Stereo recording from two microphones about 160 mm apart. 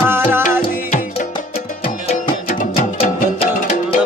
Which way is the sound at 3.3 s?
35° left (ahead or behind).